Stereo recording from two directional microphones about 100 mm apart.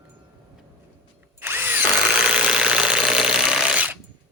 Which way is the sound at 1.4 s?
20° right (ahead or behind).